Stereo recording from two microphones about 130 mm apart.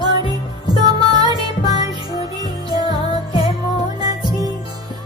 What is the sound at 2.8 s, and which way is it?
Music, 40° left (ahead or behind).